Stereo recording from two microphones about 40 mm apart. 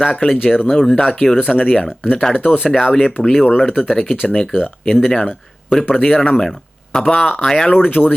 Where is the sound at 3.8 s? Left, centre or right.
Left.